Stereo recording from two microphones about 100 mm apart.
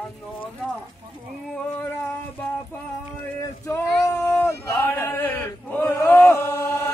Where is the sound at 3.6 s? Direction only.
25° left (ahead or behind).